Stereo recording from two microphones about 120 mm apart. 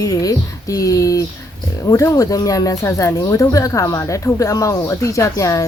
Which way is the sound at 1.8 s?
25° left (ahead or behind).